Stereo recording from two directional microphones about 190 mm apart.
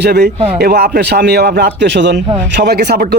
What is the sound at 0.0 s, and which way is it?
Speech, 55° right (ahead or behind).